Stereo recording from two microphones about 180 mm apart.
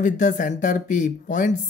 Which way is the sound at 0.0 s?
45° left (ahead or behind).